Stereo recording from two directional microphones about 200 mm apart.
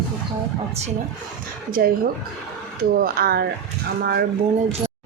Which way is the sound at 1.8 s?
50° right (ahead or behind).